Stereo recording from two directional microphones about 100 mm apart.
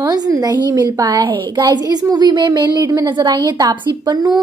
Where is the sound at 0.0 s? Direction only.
40° right (ahead or behind).